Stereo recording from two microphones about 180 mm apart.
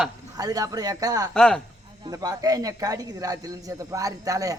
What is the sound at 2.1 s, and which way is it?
A woman's voice, 20° right (ahead or behind).